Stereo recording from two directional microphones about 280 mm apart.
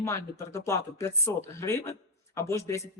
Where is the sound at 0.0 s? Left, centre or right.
Centre.